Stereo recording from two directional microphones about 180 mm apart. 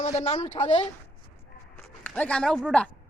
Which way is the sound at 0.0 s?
40° left (ahead or behind).